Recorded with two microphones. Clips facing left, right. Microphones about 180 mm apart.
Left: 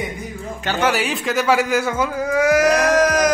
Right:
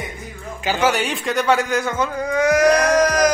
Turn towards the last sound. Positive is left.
turn(degrees=5)  # may be behind; listen again after turning